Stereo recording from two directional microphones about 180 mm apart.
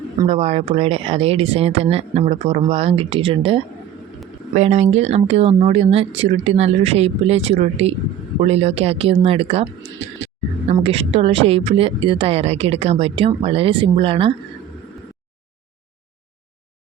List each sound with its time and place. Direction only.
0.3 s a woman's voice: 35° right (ahead or behind)
10.7 s a woman's voice: 35° right (ahead or behind)